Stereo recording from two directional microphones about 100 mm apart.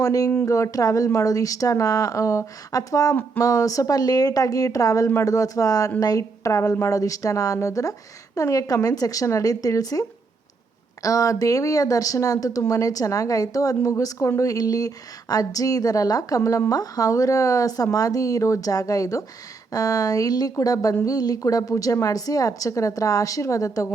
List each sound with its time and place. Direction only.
0.0 s speech: 35° left (ahead or behind)